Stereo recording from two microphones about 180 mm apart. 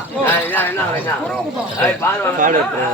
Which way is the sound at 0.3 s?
10° left (ahead or behind).